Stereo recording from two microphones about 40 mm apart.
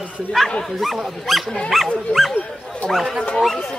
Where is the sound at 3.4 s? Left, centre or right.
Centre.